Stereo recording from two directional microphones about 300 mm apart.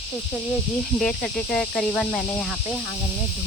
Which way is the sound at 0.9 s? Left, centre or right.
Centre.